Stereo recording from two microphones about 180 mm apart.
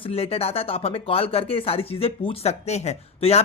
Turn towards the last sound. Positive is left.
turn(degrees=35)  # may be behind; listen again after turning